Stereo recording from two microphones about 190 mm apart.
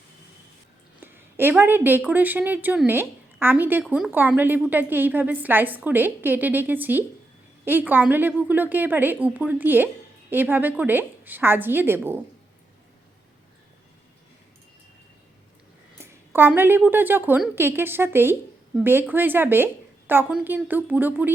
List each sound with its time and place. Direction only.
1.0 s a woman's voice: 10° right (ahead or behind)
16.0 s a woman's voice: 10° right (ahead or behind)